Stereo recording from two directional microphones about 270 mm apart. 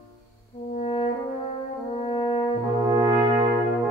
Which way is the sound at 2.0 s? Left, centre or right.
Left.